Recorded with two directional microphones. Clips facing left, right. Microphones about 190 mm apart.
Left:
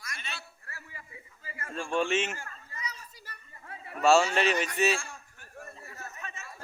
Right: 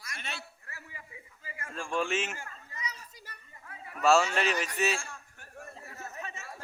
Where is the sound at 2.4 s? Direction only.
20° right (ahead or behind).